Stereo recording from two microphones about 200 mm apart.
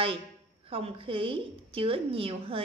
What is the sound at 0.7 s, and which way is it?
A woman's voice, 30° right (ahead or behind).